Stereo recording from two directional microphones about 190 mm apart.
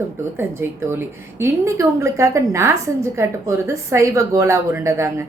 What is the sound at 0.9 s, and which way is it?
A woman's voice, 15° right (ahead or behind).